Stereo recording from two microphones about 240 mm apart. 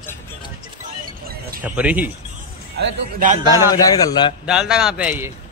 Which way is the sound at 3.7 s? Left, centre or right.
Centre.